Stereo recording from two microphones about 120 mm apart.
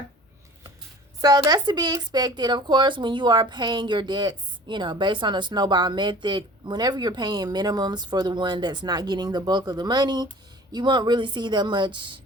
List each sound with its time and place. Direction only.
1.2 s speech: 30° right (ahead or behind)